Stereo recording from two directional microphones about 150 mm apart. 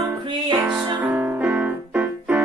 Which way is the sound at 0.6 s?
10° right (ahead or behind).